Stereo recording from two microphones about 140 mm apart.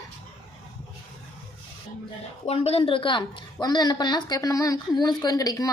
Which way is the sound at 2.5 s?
45° left (ahead or behind).